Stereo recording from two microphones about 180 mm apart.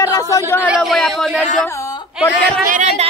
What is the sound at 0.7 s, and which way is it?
Speech, centre (ahead or behind).